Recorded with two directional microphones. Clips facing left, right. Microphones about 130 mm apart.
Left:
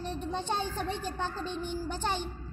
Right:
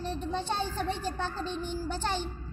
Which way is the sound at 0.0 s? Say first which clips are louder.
Right 1 dB; 15° left (ahead or behind).